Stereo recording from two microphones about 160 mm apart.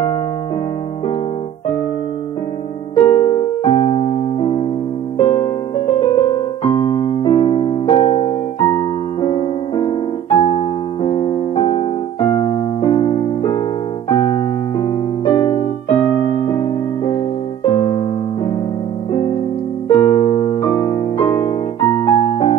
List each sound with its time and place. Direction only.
3.0 s electric piano: 35° left (ahead or behind)
5.2 s music: 35° left (ahead or behind)
5.9 s piano: 35° left (ahead or behind)
6.7 s electric piano: 35° left (ahead or behind)
9.2 s music: 30° left (ahead or behind)
11.1 s keyboard: 30° left (ahead or behind)
14.8 s electric piano: 35° left (ahead or behind)
17.6 s keyboard: 30° left (ahead or behind)
19.9 s electric piano: 35° left (ahead or behind)
20.8 s music: 30° left (ahead or behind)